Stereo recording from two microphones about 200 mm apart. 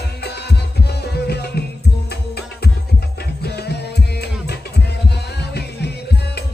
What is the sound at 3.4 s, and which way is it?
Music, 55° left (ahead or behind).